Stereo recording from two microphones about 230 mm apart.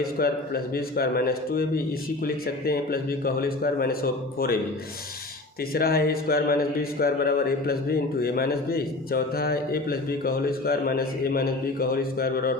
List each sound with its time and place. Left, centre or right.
0.0 s speech: left
5.7 s speech: left